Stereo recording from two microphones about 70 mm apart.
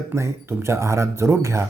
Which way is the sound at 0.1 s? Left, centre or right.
Right.